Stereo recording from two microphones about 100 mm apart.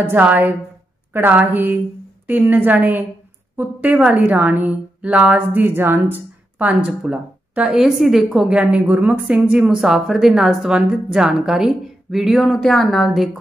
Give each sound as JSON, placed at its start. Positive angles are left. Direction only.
{"t": 0.0, "sound": "a woman's voice", "side_deg": -15}